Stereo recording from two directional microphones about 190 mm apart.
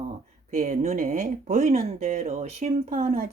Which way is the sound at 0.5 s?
40° right (ahead or behind).